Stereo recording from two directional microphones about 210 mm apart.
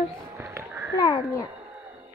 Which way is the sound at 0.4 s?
15° right (ahead or behind).